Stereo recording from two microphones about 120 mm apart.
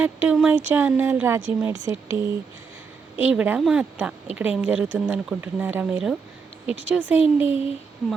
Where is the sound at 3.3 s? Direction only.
10° right (ahead or behind).